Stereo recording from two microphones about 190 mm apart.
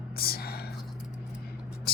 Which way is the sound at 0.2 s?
50° left (ahead or behind).